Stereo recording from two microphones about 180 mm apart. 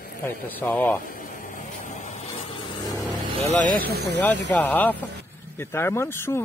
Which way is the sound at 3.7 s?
55° right (ahead or behind).